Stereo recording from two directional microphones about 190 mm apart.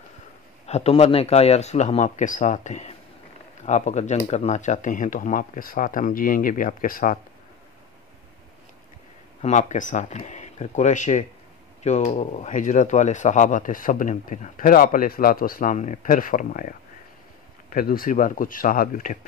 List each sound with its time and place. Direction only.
0.7 s speech: 35° left (ahead or behind)
9.4 s speech: 40° left (ahead or behind)